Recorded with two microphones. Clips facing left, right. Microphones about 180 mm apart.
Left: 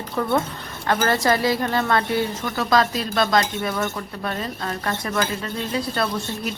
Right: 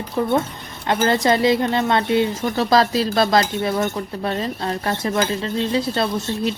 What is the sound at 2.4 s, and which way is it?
Speech, 35° right (ahead or behind).